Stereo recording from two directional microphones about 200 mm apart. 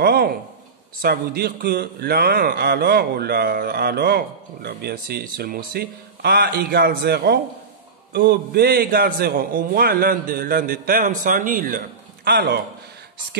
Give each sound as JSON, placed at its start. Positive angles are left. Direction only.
{"t": 0.0, "sound": "a sound", "side_deg": -50}
{"t": 1.0, "sound": "a man's voice", "side_deg": -50}
{"t": 12.3, "sound": "a man's voice", "side_deg": -55}